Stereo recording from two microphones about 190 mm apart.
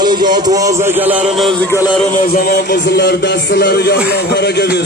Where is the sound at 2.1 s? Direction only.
50° left (ahead or behind).